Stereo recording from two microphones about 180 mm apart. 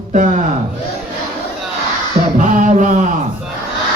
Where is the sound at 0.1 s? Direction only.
40° right (ahead or behind).